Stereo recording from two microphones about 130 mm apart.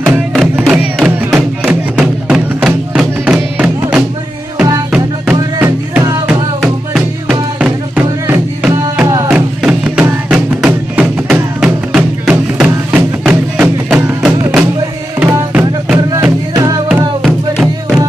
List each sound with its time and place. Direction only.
0.0 s music: centre (ahead or behind)
4.9 s music: 10° right (ahead or behind)
7.2 s music: 10° right (ahead or behind)
9.0 s music: 30° right (ahead or behind)
9.3 s music: 10° right (ahead or behind)
16.5 s music: 25° right (ahead or behind)
16.9 s music: 5° right (ahead or behind)